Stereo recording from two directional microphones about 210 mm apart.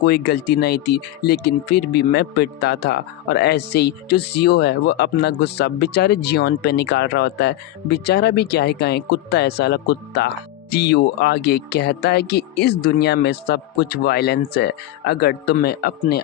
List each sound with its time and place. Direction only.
0.0 s speech: 50° left (ahead or behind)